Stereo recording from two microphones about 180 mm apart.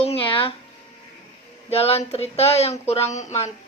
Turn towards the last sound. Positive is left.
turn(degrees=40)  # may be behind; listen again after turning